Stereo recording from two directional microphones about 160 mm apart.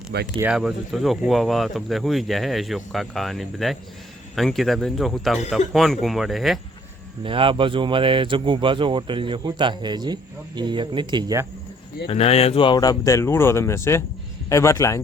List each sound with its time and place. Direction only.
0.3 s speech: 5° right (ahead or behind)
7.3 s speech: 35° right (ahead or behind)
12.0 s speech: 40° left (ahead or behind); by 15.0 s 20° left (ahead or behind)